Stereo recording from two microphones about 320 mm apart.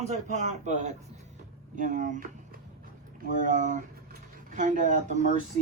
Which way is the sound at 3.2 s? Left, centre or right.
Right.